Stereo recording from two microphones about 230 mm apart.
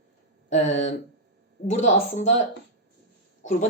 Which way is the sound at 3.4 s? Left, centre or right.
Left.